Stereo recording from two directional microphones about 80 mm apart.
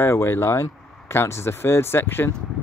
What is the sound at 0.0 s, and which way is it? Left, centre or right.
Speech, left.